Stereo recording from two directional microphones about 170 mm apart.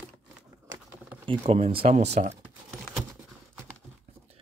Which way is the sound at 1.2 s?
35° right (ahead or behind).